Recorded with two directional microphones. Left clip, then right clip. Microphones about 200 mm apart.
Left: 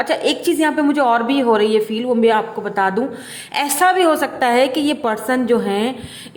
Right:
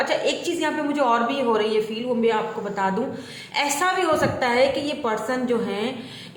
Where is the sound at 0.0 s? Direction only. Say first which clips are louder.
Left 5 dB; 50° left (ahead or behind).